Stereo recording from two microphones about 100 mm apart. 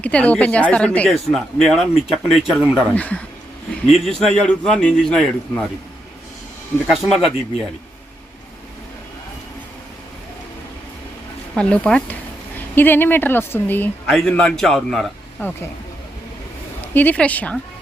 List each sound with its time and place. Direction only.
0.0 s a man's voice: 15° left (ahead or behind)
1.3 s speech: 5° left (ahead or behind)
2.9 s a man's voice: 15° left (ahead or behind)
3.8 s speech: centre (ahead or behind)
4.3 s a man's voice: 10° left (ahead or behind)
6.8 s speech: centre (ahead or behind)
11.5 s a man's voice: 10° left (ahead or behind)
14.1 s speech: 5° left (ahead or behind)
15.4 s speech: 20° left (ahead or behind)
16.9 s a man's voice: 15° left (ahead or behind)